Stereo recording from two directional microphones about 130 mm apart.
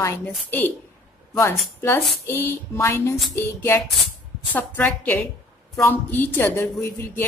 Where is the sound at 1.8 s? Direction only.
20° left (ahead or behind).